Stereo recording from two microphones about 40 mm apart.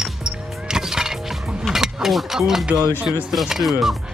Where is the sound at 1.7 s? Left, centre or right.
Centre.